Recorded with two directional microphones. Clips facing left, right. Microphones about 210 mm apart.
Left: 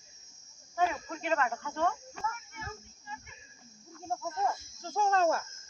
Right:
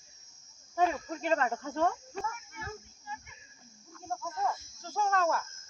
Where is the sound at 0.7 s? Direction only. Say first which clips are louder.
Right 2 dB; 35° right (ahead or behind).